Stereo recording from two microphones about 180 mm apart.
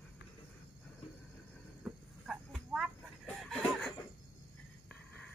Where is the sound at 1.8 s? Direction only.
5° right (ahead or behind).